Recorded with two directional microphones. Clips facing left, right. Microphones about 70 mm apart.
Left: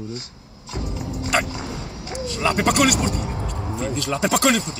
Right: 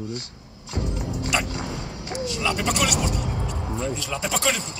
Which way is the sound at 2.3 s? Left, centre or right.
Left.